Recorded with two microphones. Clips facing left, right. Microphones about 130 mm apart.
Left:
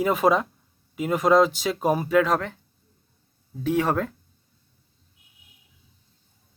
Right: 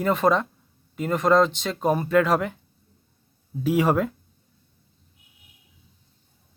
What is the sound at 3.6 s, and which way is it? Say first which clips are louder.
Speech: right 2 dB; 5° right (ahead or behind).